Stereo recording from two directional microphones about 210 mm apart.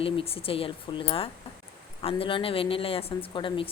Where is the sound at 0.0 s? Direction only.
25° left (ahead or behind).